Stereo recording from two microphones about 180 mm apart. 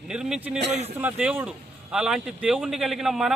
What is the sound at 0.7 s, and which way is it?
Speech, 35° right (ahead or behind).